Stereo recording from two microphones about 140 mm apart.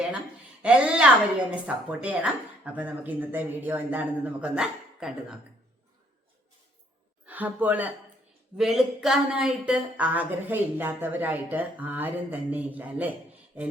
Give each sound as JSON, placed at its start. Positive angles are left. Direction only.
{"t": 0.6, "sound": "speech", "side_deg": -10}
{"t": 7.3, "sound": "speech", "side_deg": -10}